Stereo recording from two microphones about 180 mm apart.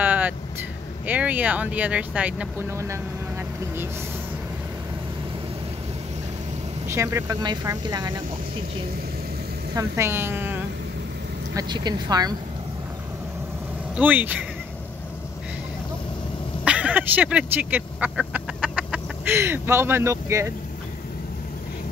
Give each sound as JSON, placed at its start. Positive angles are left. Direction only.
{"t": 0.0, "sound": "vehicle", "side_deg": -10}
{"t": 1.0, "sound": "speech", "side_deg": -10}
{"t": 6.9, "sound": "speech", "side_deg": -15}
{"t": 9.8, "sound": "speech", "side_deg": -15}
{"t": 11.5, "sound": "speech", "side_deg": -20}
{"t": 13.9, "sound": "speech", "side_deg": -10}
{"t": 16.6, "sound": "speech", "side_deg": -5}